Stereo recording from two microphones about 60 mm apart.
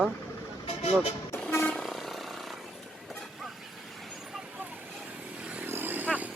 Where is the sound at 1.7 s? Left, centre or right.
Centre.